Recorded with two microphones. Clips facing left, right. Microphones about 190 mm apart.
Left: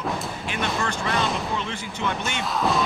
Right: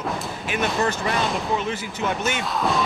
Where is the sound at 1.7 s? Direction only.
5° right (ahead or behind).